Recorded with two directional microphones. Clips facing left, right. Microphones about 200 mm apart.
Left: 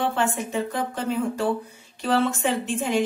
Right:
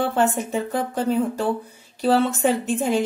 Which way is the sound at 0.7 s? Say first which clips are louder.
Right 7 dB; 40° right (ahead or behind).